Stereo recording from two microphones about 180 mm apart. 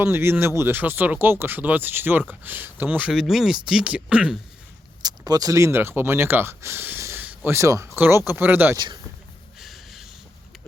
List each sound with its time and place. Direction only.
0.0 s speech: 15° right (ahead or behind)
5.0 s speech: 20° right (ahead or behind)
9.6 s snort: centre (ahead or behind)